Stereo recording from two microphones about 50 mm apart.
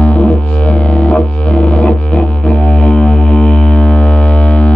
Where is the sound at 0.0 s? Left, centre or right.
Left.